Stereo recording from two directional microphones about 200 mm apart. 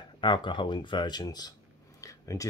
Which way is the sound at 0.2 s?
25° left (ahead or behind).